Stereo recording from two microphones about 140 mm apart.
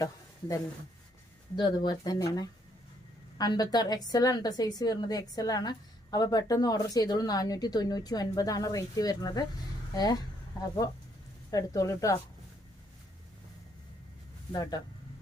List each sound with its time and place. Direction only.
0.0 s a woman's voice: 25° left (ahead or behind)
11.5 s a woman's voice: 25° left (ahead or behind)
14.5 s a woman's voice: 30° left (ahead or behind)